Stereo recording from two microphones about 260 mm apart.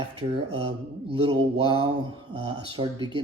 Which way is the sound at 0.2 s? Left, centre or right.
Right.